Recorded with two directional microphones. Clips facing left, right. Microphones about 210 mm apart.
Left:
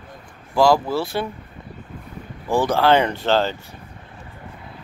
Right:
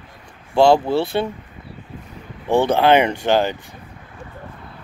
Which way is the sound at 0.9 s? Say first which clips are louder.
Right 4 dB; 60° right (ahead or behind).